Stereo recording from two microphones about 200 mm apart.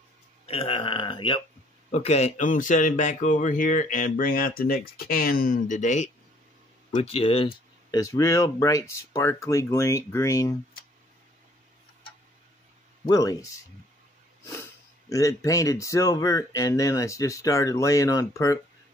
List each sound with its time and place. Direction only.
0.5 s speech: 30° left (ahead or behind)
8.0 s speech: 15° left (ahead or behind)
13.0 s speech: 20° left (ahead or behind)
15.0 s speech: 15° left (ahead or behind)